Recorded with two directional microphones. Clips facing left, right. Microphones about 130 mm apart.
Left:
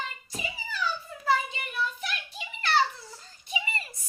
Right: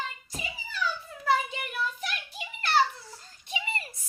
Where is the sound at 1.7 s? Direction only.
40° right (ahead or behind).